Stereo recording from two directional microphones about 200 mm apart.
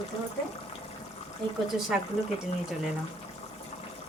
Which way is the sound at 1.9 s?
5° right (ahead or behind).